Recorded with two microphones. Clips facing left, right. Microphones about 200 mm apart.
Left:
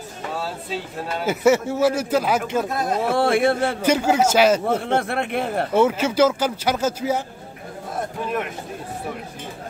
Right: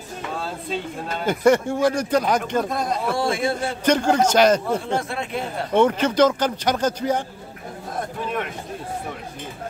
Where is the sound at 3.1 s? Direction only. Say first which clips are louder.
Left 7 dB; 60° left (ahead or behind).